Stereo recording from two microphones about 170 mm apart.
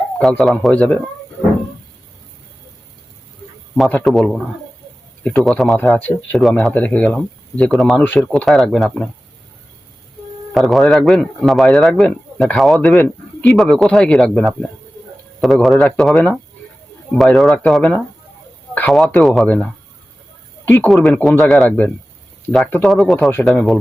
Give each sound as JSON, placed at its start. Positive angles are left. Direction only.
{"t": 0.2, "sound": "speech", "side_deg": 0}
{"t": 3.8, "sound": "speech", "side_deg": 5}
{"t": 10.5, "sound": "a man's voice", "side_deg": 0}
{"t": 20.8, "sound": "speech", "side_deg": 0}